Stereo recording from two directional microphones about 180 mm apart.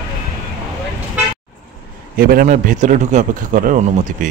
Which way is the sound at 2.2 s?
55° right (ahead or behind).